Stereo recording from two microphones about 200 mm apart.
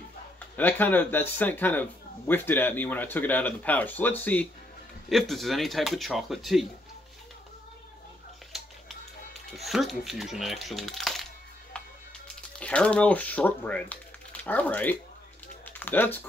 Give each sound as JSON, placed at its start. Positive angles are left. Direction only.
{"t": 0.6, "sound": "speech", "side_deg": 10}
{"t": 9.5, "sound": "speech", "side_deg": 0}
{"t": 12.5, "sound": "speech", "side_deg": 5}
{"t": 15.6, "sound": "typing", "side_deg": 10}